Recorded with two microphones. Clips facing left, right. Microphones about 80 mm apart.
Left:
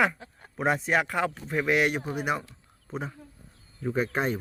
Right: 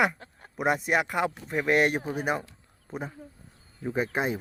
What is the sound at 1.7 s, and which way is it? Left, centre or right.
Speech, right.